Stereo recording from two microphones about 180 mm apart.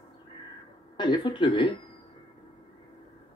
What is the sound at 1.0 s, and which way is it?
Speech, 25° left (ahead or behind).